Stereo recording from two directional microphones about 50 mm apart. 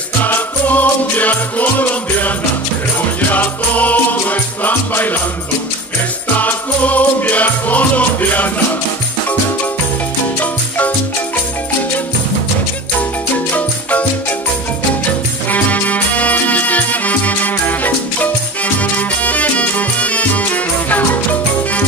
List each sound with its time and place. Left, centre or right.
0.2 s music: left
6.3 s music: left
13.5 s music: left
15.5 s music: left